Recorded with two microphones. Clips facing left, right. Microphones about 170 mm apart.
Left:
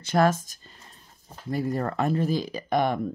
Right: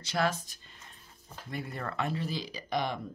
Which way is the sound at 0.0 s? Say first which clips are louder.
Left 8 dB; 50° left (ahead or behind).